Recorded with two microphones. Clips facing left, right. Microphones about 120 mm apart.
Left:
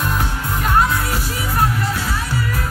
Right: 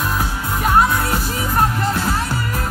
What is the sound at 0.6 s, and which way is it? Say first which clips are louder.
Music: right 2 dB; 15° right (ahead or behind).